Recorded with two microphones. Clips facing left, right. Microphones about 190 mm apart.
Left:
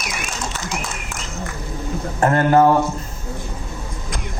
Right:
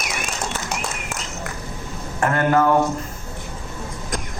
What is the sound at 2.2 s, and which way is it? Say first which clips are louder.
Speech: left 4 dB; 30° left (ahead or behind).